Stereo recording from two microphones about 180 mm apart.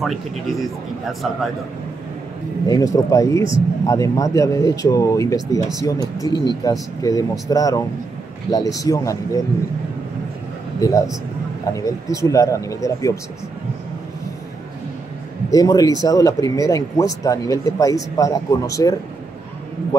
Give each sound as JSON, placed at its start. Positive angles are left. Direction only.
{"t": 0.0, "sound": "a man's voice", "side_deg": 0}
{"t": 2.7, "sound": "speech", "side_deg": 20}
{"t": 10.8, "sound": "speech", "side_deg": 20}
{"t": 15.5, "sound": "speech", "side_deg": 20}